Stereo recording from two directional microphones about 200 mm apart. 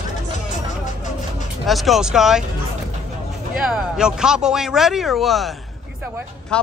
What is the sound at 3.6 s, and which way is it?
Speech, 5° right (ahead or behind).